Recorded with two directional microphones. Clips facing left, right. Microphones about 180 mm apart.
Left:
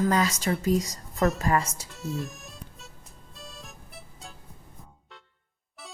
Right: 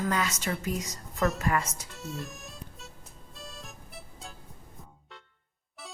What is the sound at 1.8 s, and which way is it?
Music, centre (ahead or behind).